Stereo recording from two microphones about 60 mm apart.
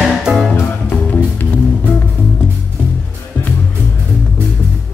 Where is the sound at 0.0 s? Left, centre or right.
Centre.